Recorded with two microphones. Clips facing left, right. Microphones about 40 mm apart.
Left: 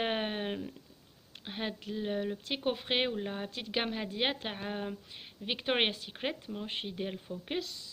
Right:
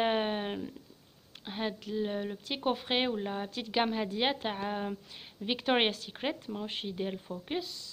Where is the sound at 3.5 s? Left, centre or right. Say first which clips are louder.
Right 6 dB; left.